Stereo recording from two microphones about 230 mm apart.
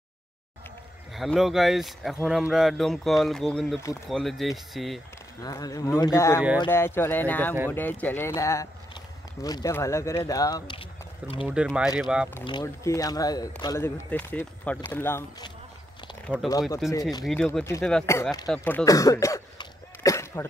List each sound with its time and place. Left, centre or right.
1.1 s speech: centre
5.4 s speech: centre
11.4 s speech: centre
12.4 s speech: centre
16.3 s speech: centre